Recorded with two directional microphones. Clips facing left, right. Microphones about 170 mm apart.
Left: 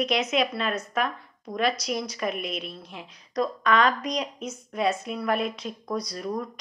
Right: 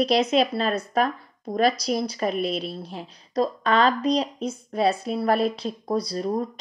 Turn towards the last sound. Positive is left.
turn(degrees=-30)  # may be behind; listen again after turning